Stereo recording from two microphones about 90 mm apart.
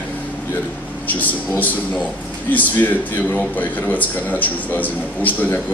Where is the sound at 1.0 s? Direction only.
20° left (ahead or behind).